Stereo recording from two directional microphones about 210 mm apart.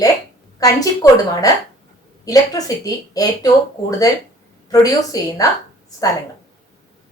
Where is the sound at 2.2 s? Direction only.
15° left (ahead or behind).